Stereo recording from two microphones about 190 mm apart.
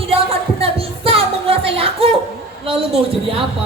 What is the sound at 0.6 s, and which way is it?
Music, 30° right (ahead or behind).